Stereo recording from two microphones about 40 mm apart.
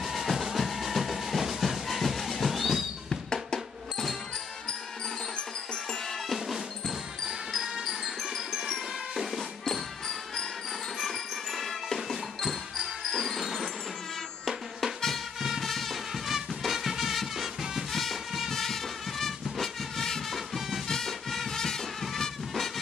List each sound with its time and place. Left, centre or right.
0.0 s music: centre
3.1 s drum: centre
7.2 s music: centre
9.7 s music: centre
15.6 s music: centre
16.3 s music: centre
17.9 s music: centre